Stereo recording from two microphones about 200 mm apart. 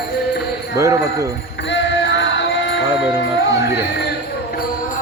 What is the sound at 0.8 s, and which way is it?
Speech, 15° right (ahead or behind).